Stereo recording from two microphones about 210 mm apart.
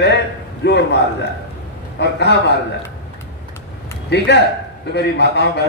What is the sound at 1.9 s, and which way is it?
Speech, 55° left (ahead or behind).